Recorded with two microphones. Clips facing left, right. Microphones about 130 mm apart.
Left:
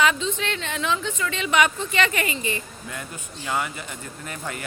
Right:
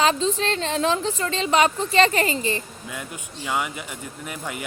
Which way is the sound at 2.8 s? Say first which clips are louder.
Right 1 dB; 10° right (ahead or behind).